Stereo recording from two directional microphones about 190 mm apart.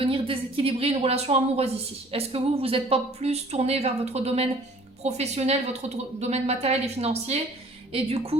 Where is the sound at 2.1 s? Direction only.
30° right (ahead or behind).